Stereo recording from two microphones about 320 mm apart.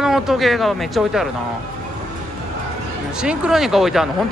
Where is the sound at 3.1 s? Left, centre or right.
Centre.